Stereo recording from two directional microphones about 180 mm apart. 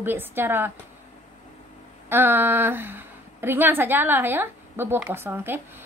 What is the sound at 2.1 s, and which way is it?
A woman's voice, 10° right (ahead or behind).